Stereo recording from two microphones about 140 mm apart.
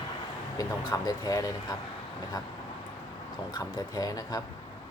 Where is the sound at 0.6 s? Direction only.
25° left (ahead or behind).